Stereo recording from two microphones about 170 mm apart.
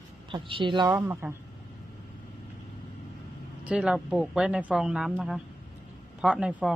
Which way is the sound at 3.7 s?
5° right (ahead or behind).